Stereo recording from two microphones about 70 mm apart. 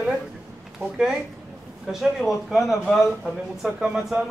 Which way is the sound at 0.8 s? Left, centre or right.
Right.